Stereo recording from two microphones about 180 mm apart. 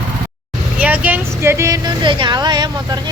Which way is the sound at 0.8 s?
10° right (ahead or behind).